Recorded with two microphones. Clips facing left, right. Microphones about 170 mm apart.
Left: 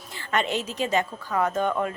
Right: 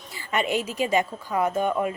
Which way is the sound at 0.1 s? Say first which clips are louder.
Right 1 dB; 10° right (ahead or behind).